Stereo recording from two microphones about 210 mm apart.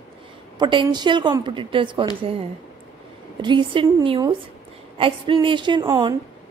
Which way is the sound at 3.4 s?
25° right (ahead or behind).